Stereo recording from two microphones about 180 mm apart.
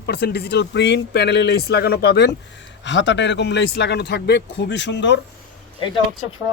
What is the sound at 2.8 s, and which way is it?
A man's voice, 85° left.